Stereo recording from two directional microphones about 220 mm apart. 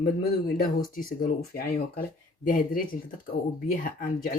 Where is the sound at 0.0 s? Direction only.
40° left (ahead or behind).